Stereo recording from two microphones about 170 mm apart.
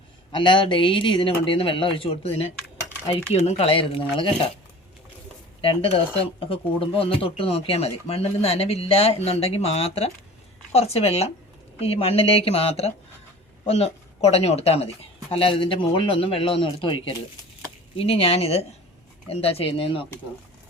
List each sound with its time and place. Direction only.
0.3 s speech: 30° left (ahead or behind)
5.6 s speech: 35° left (ahead or behind)